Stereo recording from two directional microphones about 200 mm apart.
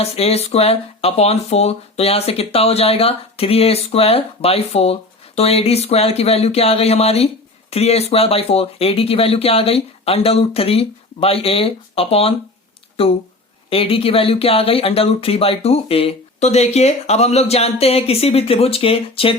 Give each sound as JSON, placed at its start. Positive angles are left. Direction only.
{"t": 0.0, "sound": "speech", "side_deg": 30}
{"t": 13.7, "sound": "speech", "side_deg": 30}